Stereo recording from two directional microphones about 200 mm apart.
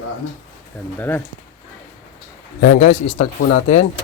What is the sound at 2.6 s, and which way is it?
Speech, 40° left (ahead or behind).